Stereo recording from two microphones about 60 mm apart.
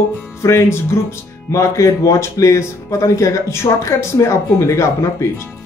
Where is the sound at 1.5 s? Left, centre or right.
Left.